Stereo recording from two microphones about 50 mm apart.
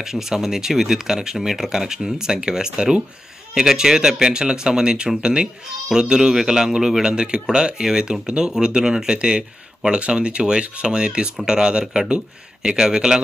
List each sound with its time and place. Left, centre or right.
0.0 s a man's voice: centre